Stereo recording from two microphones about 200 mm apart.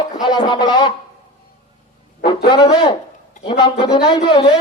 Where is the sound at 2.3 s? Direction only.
25° left (ahead or behind).